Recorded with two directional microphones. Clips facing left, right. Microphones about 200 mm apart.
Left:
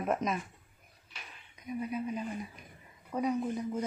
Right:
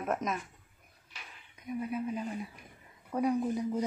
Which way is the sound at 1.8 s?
Centre (ahead or behind).